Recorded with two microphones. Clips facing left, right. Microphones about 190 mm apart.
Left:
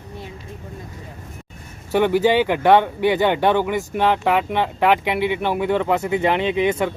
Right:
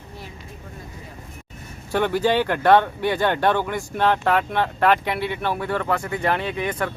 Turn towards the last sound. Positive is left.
turn(degrees=20)  # may be behind; listen again after turning